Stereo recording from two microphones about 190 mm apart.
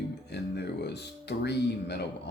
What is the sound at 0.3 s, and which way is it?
Music, 60° left (ahead or behind).